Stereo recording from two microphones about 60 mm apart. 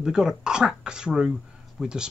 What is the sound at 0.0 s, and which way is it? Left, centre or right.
Speech, centre.